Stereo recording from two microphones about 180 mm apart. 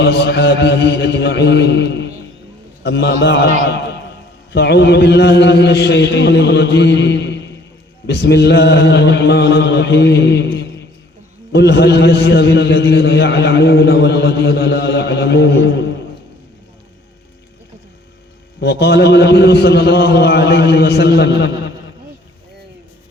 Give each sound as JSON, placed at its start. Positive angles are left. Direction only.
{"t": 0.0, "sound": "a man's voice", "side_deg": 70}
{"t": 4.5, "sound": "a man's voice", "side_deg": 70}
{"t": 18.6, "sound": "a man's voice", "side_deg": 65}